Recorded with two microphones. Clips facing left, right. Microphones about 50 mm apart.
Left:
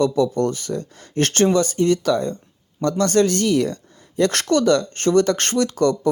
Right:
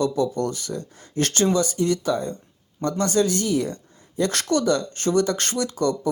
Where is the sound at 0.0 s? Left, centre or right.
Left.